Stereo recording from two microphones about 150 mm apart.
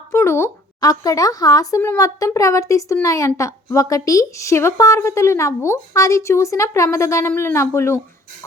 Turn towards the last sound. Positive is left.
turn(degrees=20)  # may be behind; listen again after turning